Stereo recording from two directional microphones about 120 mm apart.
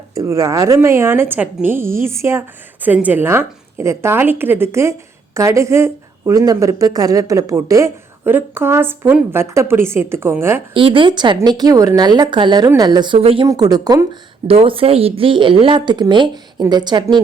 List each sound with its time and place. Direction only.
0.1 s a woman's voice: 30° right (ahead or behind)
10.8 s a woman's voice: 45° right (ahead or behind)
13.1 s speech: 50° right (ahead or behind)
13.5 s a woman's voice: 30° right (ahead or behind)
14.4 s speech: 50° right (ahead or behind)